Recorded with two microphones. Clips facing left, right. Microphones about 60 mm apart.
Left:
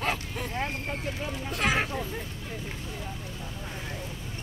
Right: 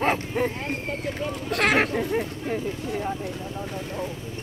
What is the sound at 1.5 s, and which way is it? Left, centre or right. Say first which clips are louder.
Speech: right 6 dB; right.